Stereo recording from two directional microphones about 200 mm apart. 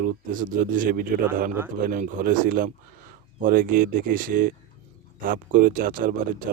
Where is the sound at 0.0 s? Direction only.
40° right (ahead or behind).